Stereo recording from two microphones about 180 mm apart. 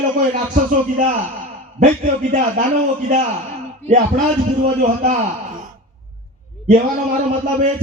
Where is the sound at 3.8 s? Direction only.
40° right (ahead or behind).